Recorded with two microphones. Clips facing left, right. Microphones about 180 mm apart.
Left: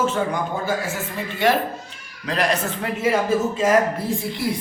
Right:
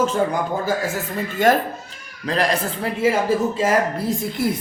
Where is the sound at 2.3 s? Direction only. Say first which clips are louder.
Right 1 dB; 35° right (ahead or behind).